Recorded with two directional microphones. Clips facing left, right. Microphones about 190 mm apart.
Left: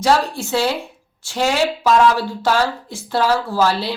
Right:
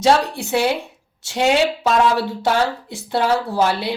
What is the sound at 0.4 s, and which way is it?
Speech, 20° right (ahead or behind).